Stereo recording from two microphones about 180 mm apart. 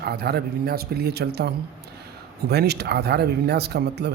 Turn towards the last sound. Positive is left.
turn(degrees=-65)  # may be behind; listen again after turning